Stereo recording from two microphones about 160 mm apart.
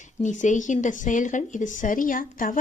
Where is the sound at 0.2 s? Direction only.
50° left (ahead or behind).